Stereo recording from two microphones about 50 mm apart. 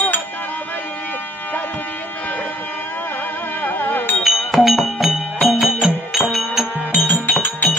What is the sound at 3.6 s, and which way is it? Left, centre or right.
Music, left.